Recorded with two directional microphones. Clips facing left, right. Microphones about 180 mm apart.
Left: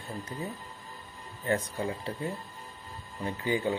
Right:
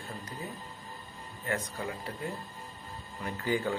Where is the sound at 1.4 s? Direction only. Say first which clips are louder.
Left 5 dB; 30° left (ahead or behind).